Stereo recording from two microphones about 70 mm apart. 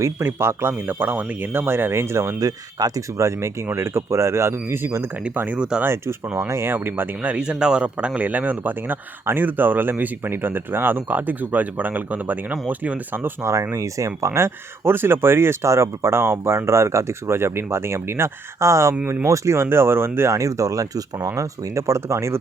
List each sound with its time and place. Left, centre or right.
0.0 s speech: right
2.4 s speech: right
3.2 s speech: right
5.5 s speech: centre
5.8 s speech: right
13.4 s speech: right
20.3 s speech: right